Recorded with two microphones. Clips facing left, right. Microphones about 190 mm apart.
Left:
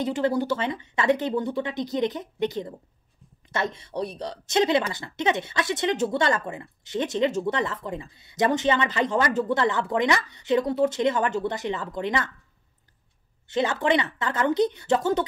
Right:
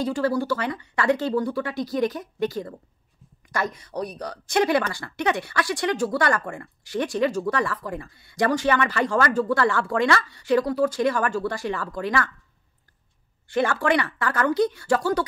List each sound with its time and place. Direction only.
0.0 s speech: 20° left (ahead or behind)
13.5 s speech: 20° left (ahead or behind)